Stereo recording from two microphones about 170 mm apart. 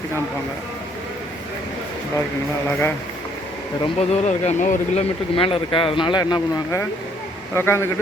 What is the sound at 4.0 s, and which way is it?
Speech, 40° left (ahead or behind).